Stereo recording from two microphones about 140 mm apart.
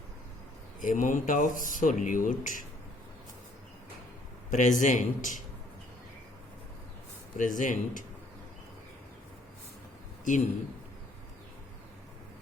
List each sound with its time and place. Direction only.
0.8 s speech: 65° left (ahead or behind)
4.5 s speech: 65° left (ahead or behind)
7.3 s speech: 65° left (ahead or behind)
10.3 s speech: 65° left (ahead or behind)